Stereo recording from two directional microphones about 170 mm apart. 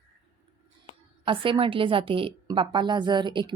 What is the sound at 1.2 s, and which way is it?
A woman's voice, 30° right (ahead or behind).